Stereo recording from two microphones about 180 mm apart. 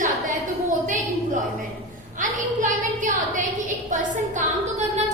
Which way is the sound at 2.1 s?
45° right (ahead or behind).